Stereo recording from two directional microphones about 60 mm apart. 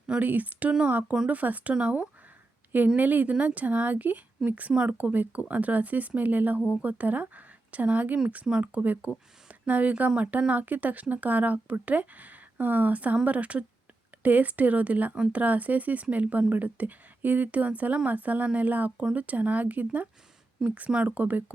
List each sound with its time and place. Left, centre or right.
0.2 s speech: right